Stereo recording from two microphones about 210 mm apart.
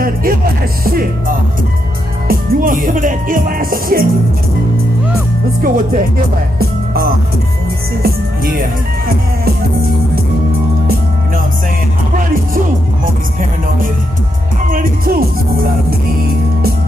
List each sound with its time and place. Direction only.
0.0 s music: 45° right (ahead or behind)
5.6 s music: 40° right (ahead or behind)
12.5 s music: 40° right (ahead or behind)
14.7 s music: 45° right (ahead or behind)